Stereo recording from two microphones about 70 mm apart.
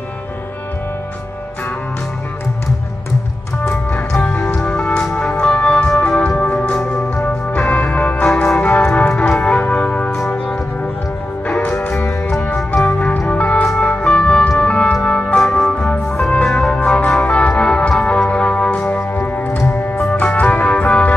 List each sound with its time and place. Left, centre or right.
4.1 s music: centre
8.3 s music: centre
8.5 s music: centre
11.6 s music: left
12.0 s music: centre
19.6 s music: centre